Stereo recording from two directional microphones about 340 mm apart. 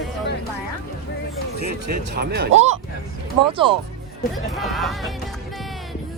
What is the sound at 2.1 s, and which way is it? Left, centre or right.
Speech, right.